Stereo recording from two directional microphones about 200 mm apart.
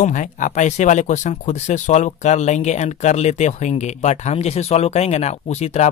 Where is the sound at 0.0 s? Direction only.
40° left (ahead or behind).